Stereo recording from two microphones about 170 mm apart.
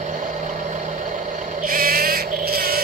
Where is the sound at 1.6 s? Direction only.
55° right (ahead or behind).